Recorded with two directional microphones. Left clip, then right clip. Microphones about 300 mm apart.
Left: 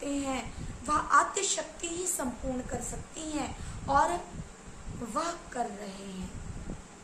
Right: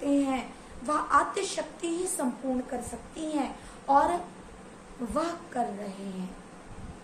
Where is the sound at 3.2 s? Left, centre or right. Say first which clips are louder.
Right 5 dB; centre.